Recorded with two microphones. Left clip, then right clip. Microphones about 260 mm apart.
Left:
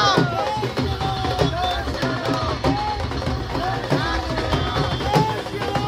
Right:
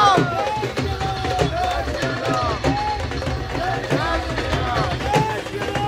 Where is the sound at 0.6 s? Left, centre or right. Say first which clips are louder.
Even; centre.